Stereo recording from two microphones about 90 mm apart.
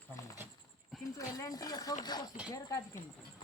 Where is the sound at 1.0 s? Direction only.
40° left (ahead or behind).